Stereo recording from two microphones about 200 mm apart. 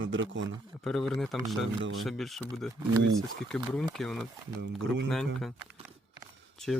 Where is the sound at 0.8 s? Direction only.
Centre (ahead or behind).